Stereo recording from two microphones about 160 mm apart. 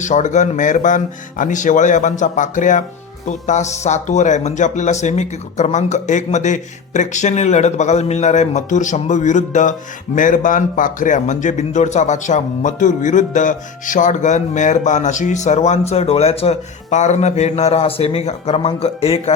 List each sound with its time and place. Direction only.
0.0 s speech: 50° left (ahead or behind)